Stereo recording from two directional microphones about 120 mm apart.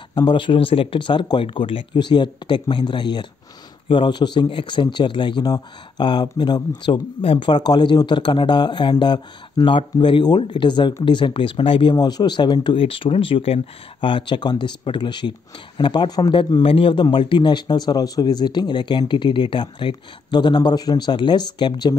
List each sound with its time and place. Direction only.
0.1 s speech: 40° left (ahead or behind)